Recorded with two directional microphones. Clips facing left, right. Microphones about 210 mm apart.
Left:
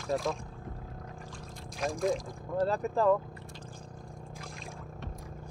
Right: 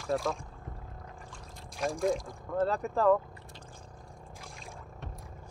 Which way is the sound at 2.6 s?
35° left (ahead or behind).